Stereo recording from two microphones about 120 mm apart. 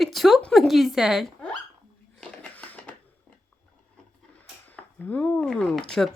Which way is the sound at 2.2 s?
10° left (ahead or behind).